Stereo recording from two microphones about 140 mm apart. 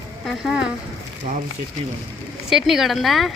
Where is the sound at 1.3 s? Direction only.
65° right (ahead or behind).